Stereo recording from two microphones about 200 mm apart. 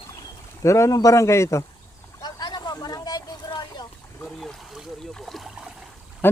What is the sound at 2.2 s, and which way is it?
Vehicle, 20° left (ahead or behind).